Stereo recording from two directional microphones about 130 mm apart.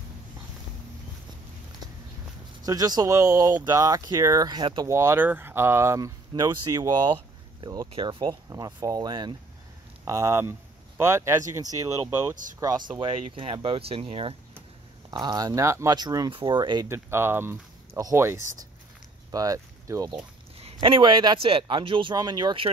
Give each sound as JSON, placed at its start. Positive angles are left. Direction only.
{"t": 2.6, "sound": "speech", "side_deg": -30}
{"t": 4.8, "sound": "speech", "side_deg": -20}
{"t": 13.4, "sound": "speech", "side_deg": -45}
{"t": 15.0, "sound": "speech", "side_deg": -30}
{"t": 16.9, "sound": "speech", "side_deg": -20}
{"t": 20.6, "sound": "speech", "side_deg": -40}